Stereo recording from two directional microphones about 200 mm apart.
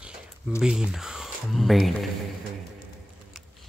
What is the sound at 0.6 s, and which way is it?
Speech, 5° right (ahead or behind).